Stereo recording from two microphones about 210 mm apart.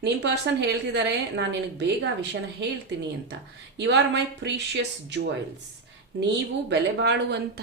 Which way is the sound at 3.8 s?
55° right (ahead or behind).